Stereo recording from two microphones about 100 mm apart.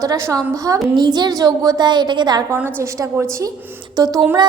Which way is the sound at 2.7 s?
30° right (ahead or behind).